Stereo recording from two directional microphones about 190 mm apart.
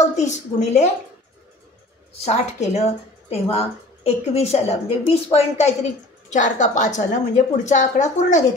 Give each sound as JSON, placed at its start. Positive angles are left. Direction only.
{"t": 0.0, "sound": "a woman's voice", "side_deg": 40}
{"t": 2.2, "sound": "a woman's voice", "side_deg": 35}